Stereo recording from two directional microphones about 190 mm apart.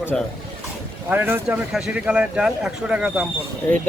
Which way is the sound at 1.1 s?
10° right (ahead or behind).